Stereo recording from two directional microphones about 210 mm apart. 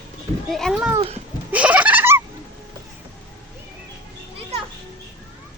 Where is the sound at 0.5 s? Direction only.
Centre (ahead or behind).